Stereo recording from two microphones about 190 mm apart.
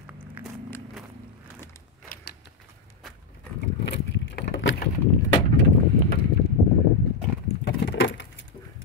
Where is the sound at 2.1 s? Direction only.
60° left (ahead or behind).